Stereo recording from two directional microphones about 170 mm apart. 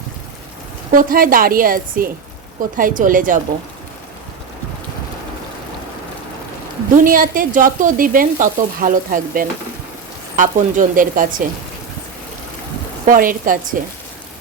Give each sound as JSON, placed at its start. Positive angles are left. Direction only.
{"t": 0.9, "sound": "a woman's voice", "side_deg": -55}
{"t": 6.9, "sound": "speech", "side_deg": -55}
{"t": 13.1, "sound": "speech", "side_deg": -55}